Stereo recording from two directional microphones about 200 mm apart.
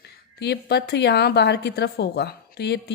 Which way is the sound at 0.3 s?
55° left (ahead or behind).